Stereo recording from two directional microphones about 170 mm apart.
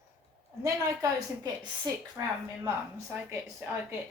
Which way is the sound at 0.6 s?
20° right (ahead or behind).